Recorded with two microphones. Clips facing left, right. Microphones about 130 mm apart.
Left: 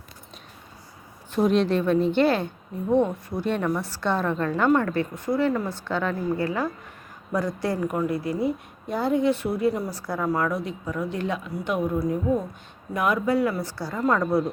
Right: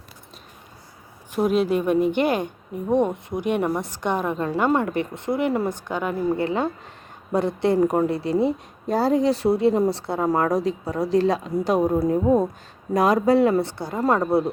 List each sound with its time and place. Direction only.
1.3 s a woman's voice: 5° right (ahead or behind); by 7.8 s 25° right (ahead or behind)
7.8 s a woman's voice: 35° right (ahead or behind)